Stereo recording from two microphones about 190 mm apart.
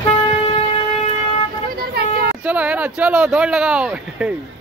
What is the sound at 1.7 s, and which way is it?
Vehicle, 55° right (ahead or behind).